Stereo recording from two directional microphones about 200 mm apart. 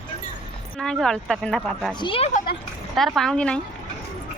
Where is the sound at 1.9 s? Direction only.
25° left (ahead or behind).